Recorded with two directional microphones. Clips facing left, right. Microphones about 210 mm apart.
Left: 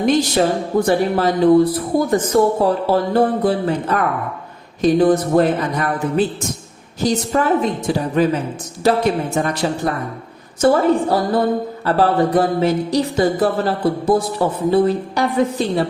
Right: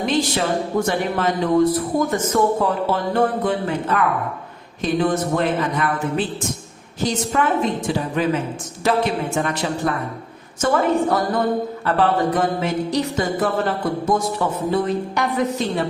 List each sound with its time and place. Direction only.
0.0 s music: 40° left (ahead or behind)